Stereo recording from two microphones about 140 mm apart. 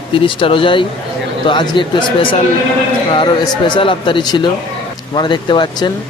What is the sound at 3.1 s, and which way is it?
Speech, 35° left (ahead or behind).